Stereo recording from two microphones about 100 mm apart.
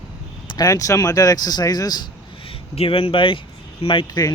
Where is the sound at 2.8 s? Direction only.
65° left (ahead or behind).